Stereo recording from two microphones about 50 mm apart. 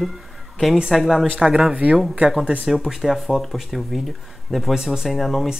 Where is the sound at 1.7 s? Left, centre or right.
Right.